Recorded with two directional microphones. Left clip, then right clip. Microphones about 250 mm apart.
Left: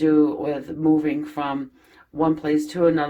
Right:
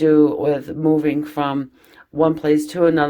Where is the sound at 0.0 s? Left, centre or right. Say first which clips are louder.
Right 5 dB; right.